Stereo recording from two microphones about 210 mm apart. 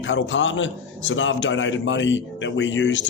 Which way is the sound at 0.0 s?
65° left (ahead or behind).